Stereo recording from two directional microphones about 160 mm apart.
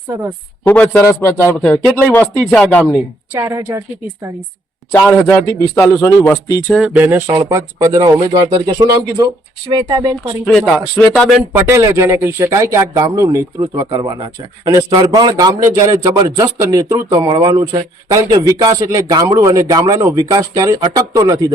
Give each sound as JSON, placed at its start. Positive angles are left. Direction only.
{"t": 0.6, "sound": "speech", "side_deg": 10}
{"t": 1.5, "sound": "speech", "side_deg": 5}
{"t": 3.3, "sound": "a woman's voice", "side_deg": -20}
{"t": 4.9, "sound": "speech", "side_deg": 15}
{"t": 6.7, "sound": "a woman's voice", "side_deg": -5}
{"t": 10.9, "sound": "speech", "side_deg": 5}
{"t": 11.5, "sound": "speech", "side_deg": -15}